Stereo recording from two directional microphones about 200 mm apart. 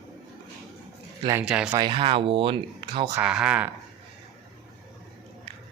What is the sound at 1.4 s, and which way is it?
Speech, 5° right (ahead or behind).